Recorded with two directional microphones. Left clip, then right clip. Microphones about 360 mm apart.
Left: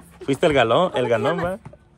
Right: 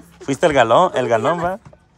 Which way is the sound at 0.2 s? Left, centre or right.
Centre.